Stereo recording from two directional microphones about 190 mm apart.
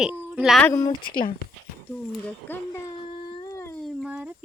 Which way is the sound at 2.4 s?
10° left (ahead or behind).